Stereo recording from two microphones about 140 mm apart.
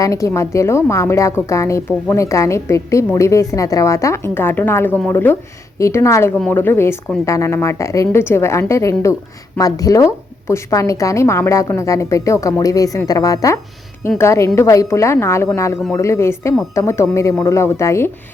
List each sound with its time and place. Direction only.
0.0 s a woman's voice: 20° left (ahead or behind)